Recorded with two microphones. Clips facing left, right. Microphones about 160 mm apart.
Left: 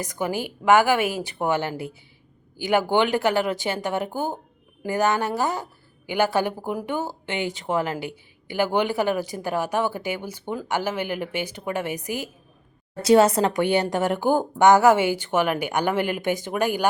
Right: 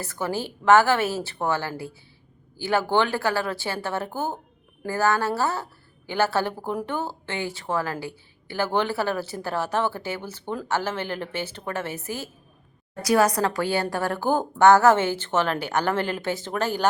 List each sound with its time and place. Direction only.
0.0 s a woman's voice: 15° left (ahead or behind)